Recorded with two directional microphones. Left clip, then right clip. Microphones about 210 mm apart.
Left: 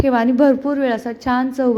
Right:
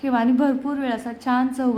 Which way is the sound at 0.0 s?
20° left (ahead or behind).